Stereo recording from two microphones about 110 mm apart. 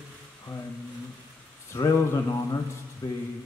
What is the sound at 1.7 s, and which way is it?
Speech, 30° left (ahead or behind).